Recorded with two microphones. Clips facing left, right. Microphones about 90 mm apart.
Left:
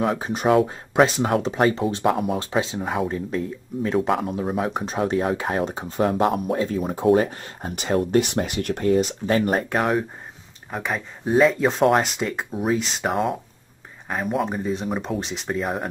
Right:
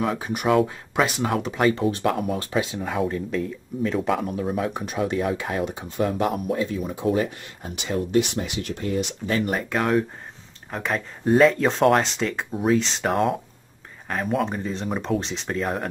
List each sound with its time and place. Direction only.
0.0 s speech: 35° left (ahead or behind)
10.7 s speech: 5° left (ahead or behind)